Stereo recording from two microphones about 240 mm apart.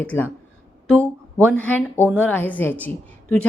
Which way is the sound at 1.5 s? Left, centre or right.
Centre.